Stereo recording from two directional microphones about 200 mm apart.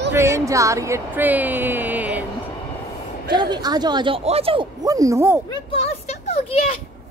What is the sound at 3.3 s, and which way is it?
Speech, 20° right (ahead or behind).